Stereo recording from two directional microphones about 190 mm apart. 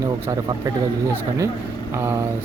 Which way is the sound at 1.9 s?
15° right (ahead or behind).